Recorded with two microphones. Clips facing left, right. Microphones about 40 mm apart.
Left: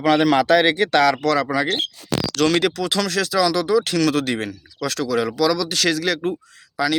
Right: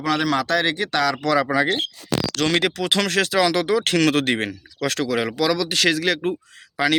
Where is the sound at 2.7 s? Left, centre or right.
Right.